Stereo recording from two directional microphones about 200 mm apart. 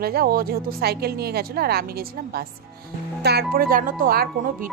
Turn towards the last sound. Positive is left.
turn(degrees=-45)  # may be behind; listen again after turning